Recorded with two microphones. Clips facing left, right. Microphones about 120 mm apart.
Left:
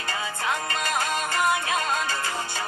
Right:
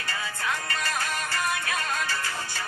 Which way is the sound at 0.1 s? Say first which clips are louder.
Left 3 dB; 20° left (ahead or behind).